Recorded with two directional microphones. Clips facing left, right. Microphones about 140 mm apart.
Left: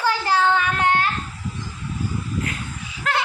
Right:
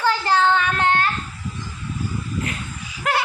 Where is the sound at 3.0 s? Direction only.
15° right (ahead or behind).